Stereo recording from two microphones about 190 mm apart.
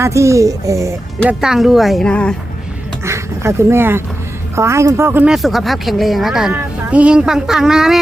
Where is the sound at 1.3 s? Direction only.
5° right (ahead or behind).